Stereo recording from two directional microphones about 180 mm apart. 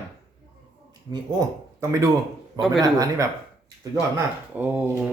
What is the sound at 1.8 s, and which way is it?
Speech, 20° right (ahead or behind).